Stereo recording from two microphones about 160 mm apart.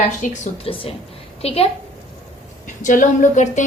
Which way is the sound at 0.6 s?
35° left (ahead or behind).